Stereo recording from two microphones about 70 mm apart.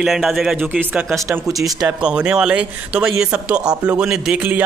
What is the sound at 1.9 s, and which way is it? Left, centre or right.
Speech, centre.